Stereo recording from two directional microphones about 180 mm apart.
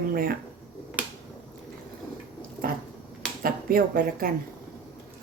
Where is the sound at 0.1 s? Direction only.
55° right (ahead or behind).